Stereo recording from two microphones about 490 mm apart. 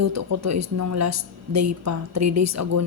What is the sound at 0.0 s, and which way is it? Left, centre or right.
A woman's voice, right.